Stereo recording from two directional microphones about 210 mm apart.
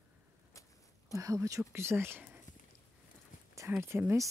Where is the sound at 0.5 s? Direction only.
15° left (ahead or behind).